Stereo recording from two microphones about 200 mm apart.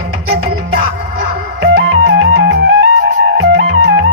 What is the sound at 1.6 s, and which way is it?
Music, 65° right (ahead or behind).